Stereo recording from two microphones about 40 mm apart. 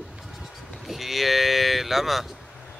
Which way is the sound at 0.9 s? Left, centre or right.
Centre.